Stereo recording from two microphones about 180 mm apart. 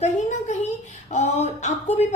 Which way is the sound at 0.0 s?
40° left (ahead or behind).